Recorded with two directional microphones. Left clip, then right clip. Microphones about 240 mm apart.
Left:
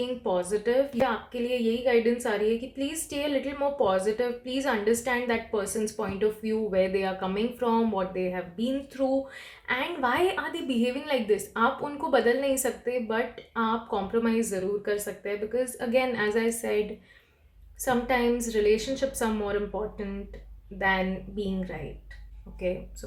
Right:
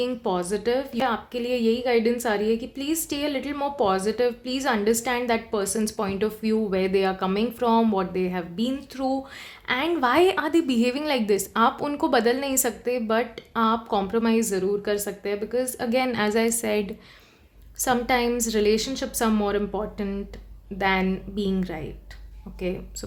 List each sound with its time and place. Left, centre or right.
0.0 s a woman's voice: right